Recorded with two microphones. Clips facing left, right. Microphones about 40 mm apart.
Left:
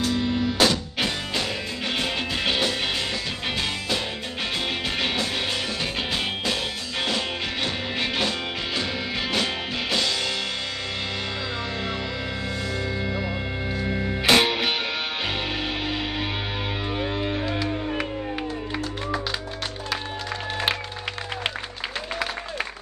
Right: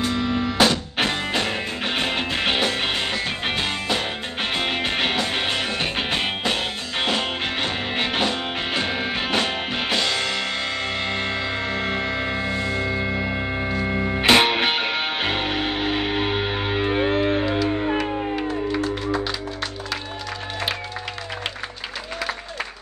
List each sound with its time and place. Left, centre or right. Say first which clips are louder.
0.0 s music: right 1 dB; right
11.7 s music: right 5 dB; right
17.9 s music: right 5 dB; centre